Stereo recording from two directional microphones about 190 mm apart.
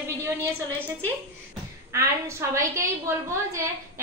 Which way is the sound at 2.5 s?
15° right (ahead or behind).